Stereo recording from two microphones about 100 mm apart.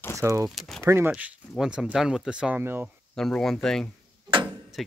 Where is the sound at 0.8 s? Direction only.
25° right (ahead or behind).